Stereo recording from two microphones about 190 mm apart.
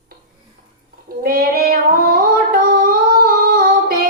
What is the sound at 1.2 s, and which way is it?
Female singing, 50° right (ahead or behind).